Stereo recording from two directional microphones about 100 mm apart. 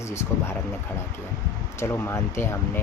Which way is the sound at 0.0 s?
30° left (ahead or behind).